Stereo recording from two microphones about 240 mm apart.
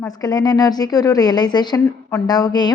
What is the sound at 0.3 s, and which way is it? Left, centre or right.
A woman's voice, centre.